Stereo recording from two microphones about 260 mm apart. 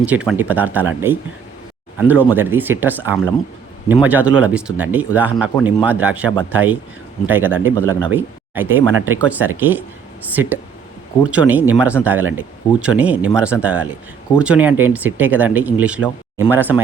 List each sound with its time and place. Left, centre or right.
0.0 s speech: centre